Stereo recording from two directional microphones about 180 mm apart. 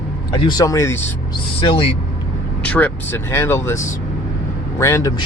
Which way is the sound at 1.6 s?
30° left (ahead or behind).